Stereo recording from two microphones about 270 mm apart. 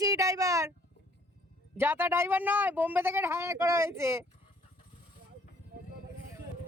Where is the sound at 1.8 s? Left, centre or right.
Centre.